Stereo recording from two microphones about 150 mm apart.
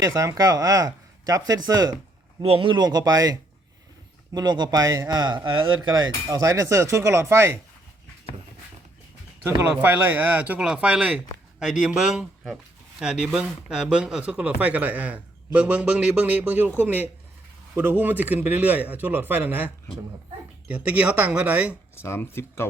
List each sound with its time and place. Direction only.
0.0 s speech: 20° right (ahead or behind)
2.4 s speech: 35° right (ahead or behind); by 7.6 s 15° right (ahead or behind)
9.8 s speech: 15° right (ahead or behind)
21.9 s speech: 15° left (ahead or behind)